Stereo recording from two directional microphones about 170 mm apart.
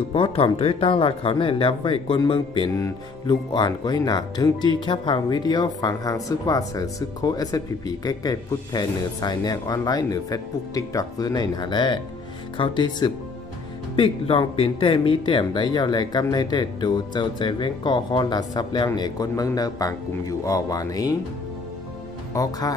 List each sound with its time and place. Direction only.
0.1 s speech: 35° left (ahead or behind)
22.3 s speech: 20° left (ahead or behind)